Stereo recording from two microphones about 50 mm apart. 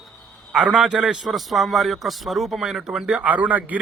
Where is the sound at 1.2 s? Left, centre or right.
Centre.